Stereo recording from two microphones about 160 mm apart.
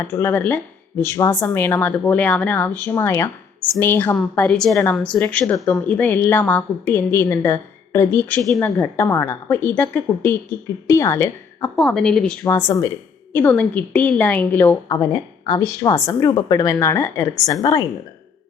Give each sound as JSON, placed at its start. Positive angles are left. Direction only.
{"t": 0.0, "sound": "a woman's voice", "side_deg": 15}
{"t": 11.8, "sound": "a woman's voice", "side_deg": 5}
{"t": 12.5, "sound": "speech", "side_deg": 20}
{"t": 14.8, "sound": "speech", "side_deg": 25}